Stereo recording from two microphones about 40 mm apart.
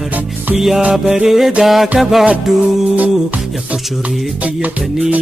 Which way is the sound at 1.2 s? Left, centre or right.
Centre.